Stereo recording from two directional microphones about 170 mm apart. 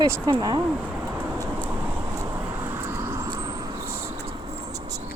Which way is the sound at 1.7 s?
10° right (ahead or behind).